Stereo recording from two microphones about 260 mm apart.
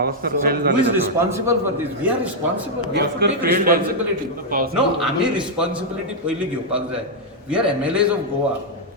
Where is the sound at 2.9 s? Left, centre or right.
Right.